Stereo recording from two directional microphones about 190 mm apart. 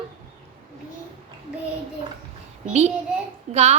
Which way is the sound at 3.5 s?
35° right (ahead or behind).